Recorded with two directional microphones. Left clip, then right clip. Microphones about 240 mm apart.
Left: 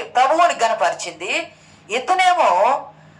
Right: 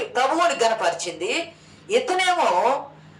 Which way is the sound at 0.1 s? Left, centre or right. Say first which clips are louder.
Left 6 dB; centre.